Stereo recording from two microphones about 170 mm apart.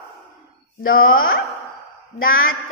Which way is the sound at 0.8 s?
60° left (ahead or behind).